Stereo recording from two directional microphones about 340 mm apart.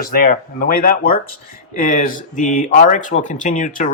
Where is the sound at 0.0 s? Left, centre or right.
Left.